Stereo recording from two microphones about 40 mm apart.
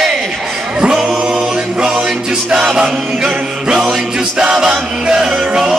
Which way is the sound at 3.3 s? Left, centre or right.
Right.